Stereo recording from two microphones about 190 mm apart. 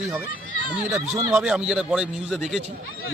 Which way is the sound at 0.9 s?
15° right (ahead or behind).